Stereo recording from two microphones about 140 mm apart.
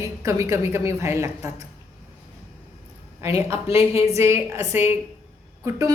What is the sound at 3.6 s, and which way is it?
Speech, 40° left (ahead or behind).